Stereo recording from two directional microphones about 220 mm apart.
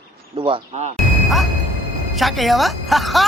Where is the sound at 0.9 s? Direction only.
Centre (ahead or behind).